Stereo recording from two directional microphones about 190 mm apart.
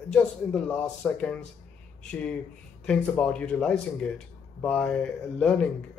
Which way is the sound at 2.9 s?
5° left (ahead or behind).